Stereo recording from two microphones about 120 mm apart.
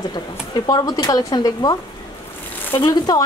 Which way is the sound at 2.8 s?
30° left (ahead or behind).